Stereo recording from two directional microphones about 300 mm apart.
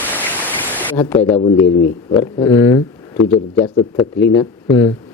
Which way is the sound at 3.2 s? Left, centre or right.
Left.